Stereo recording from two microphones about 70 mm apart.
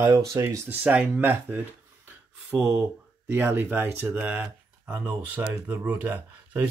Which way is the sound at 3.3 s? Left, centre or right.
Right.